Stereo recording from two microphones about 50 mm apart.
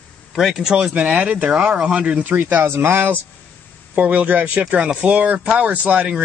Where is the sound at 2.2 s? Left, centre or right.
Right.